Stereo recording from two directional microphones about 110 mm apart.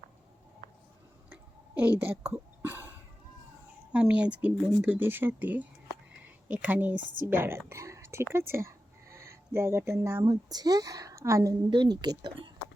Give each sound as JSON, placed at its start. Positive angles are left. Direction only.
{"t": 1.3, "sound": "a sound", "side_deg": -15}
{"t": 2.3, "sound": "cough", "side_deg": -20}
{"t": 3.9, "sound": "a woman's voice", "side_deg": -10}
{"t": 7.7, "sound": "whispering", "side_deg": -25}
{"t": 8.3, "sound": "speech", "side_deg": -20}
{"t": 10.2, "sound": "a woman's voice", "side_deg": -35}
{"t": 11.7, "sound": "a woman's voice", "side_deg": -40}